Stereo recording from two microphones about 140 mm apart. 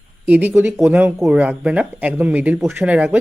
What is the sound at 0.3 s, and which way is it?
Speech, 10° right (ahead or behind).